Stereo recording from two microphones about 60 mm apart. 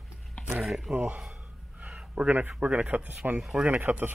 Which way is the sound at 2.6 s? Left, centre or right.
Right.